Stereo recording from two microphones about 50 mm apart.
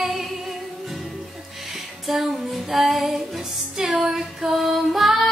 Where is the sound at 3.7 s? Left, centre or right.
Centre.